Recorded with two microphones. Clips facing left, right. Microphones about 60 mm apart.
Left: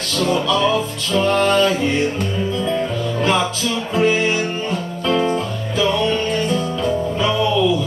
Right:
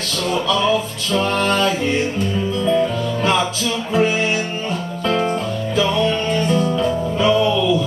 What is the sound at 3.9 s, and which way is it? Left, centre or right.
Music, centre.